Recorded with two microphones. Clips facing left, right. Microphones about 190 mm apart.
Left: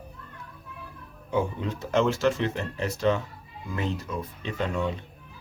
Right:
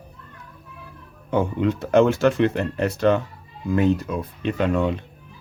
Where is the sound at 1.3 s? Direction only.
65° right (ahead or behind).